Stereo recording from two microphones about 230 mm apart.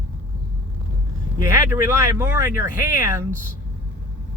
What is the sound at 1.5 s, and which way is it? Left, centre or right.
Speech, centre.